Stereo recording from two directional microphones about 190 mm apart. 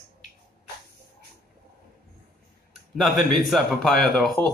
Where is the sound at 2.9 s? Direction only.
Centre (ahead or behind).